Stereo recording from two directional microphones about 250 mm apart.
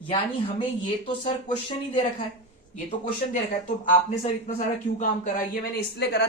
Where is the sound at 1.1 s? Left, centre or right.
Left.